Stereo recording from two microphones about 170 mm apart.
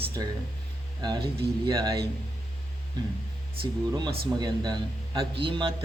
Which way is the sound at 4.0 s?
25° right (ahead or behind).